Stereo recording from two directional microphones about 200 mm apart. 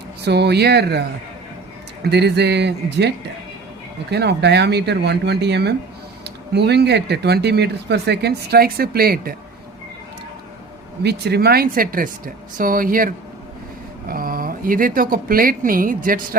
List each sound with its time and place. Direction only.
0.2 s speech: 55° right (ahead or behind)
2.0 s speech: 55° right (ahead or behind)
4.1 s speech: 55° right (ahead or behind)
11.0 s speech: 55° right (ahead or behind)